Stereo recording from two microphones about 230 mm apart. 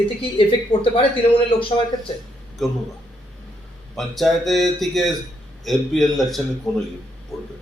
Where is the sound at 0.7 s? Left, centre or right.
Left.